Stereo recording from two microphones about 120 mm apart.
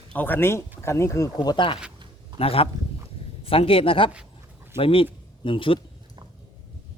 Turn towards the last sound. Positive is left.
turn(degrees=45)  # may be behind; listen again after turning